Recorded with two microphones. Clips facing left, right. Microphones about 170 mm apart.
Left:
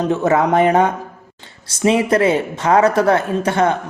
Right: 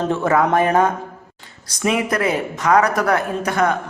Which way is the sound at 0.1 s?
20° left (ahead or behind).